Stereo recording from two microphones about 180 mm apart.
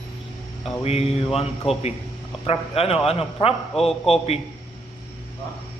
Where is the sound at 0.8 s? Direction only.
35° left (ahead or behind).